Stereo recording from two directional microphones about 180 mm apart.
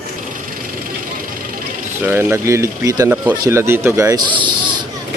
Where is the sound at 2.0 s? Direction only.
15° right (ahead or behind).